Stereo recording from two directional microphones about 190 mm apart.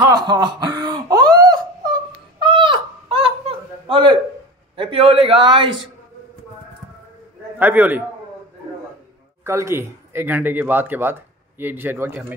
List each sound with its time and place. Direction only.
0.0 s a sound: 20° right (ahead or behind)
4.7 s a man's voice: 30° right (ahead or behind)
7.5 s speech: 10° right (ahead or behind)
9.4 s speech: 15° right (ahead or behind)